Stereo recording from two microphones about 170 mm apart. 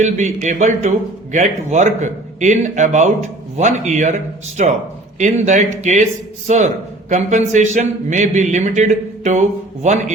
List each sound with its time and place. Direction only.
0.0 s a man's voice: 45° right (ahead or behind)